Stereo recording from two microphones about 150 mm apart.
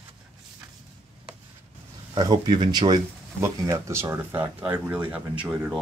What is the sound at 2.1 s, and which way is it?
Speech, 30° right (ahead or behind).